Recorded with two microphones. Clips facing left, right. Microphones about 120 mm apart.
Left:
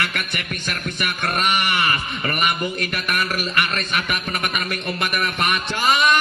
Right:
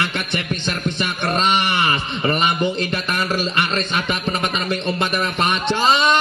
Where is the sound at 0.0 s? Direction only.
25° right (ahead or behind).